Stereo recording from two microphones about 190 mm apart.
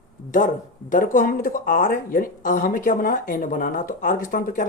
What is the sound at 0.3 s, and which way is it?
Speech, 45° left (ahead or behind).